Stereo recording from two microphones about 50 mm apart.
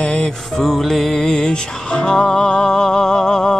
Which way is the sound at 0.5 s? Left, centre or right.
Centre.